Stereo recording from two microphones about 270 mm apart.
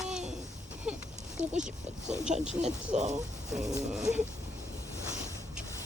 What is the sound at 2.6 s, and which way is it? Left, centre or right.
Speech, right.